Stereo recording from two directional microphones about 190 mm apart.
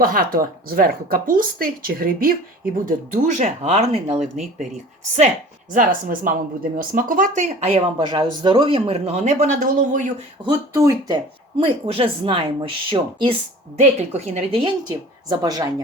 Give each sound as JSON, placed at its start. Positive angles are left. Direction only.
{"t": 0.0, "sound": "a woman's voice", "side_deg": -50}
{"t": 5.7, "sound": "a woman's voice", "side_deg": -45}
{"t": 10.4, "sound": "a woman's voice", "side_deg": -20}
{"t": 11.5, "sound": "a woman's voice", "side_deg": -30}